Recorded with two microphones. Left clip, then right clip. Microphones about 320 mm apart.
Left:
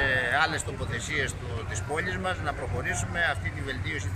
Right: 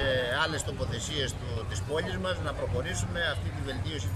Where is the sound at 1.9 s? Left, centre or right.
Centre.